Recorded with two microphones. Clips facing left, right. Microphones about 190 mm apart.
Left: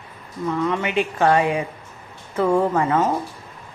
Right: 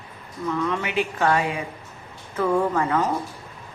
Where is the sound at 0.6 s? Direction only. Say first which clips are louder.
Left 4 dB; 20° left (ahead or behind).